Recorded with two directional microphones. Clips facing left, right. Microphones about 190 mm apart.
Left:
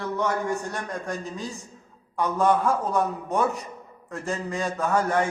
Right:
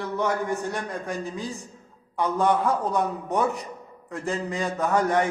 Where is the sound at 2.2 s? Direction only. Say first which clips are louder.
Even; 15° right (ahead or behind).